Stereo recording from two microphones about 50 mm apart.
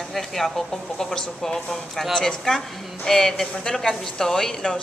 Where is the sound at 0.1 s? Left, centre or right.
Centre.